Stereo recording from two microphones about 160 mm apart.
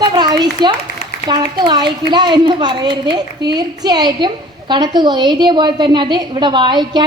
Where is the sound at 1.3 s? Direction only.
25° right (ahead or behind).